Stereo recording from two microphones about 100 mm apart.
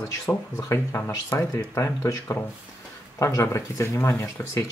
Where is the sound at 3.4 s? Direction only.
30° left (ahead or behind).